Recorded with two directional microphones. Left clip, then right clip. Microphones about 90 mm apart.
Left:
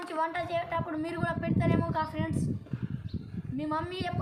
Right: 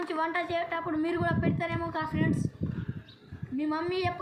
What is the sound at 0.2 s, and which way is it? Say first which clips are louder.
A woman's voice: even; 40° left (ahead or behind).